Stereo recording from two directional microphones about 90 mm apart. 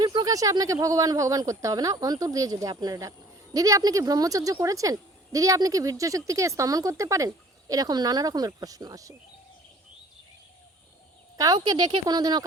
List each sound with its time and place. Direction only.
0.0 s a sound: 55° right (ahead or behind)
0.3 s speech: 40° right (ahead or behind)
11.5 s speech: 55° right (ahead or behind)